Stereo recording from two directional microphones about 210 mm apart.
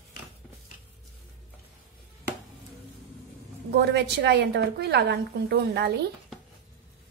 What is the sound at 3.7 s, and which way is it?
A woman's voice, 50° right (ahead or behind).